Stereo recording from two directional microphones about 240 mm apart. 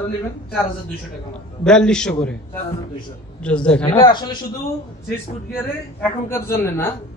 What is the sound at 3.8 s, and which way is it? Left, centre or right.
Speech, centre.